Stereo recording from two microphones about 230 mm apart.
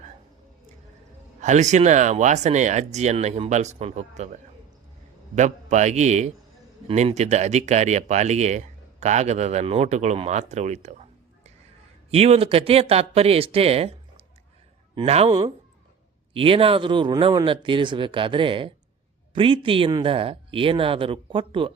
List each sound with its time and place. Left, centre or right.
1.4 s speech: right
12.1 s speech: right
14.9 s speech: right